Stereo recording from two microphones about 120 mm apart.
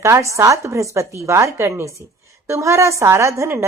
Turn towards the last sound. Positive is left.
turn(degrees=-25)  # may be behind; listen again after turning